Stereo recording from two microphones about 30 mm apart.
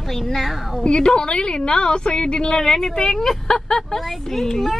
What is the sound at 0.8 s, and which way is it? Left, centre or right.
A woman's voice, left.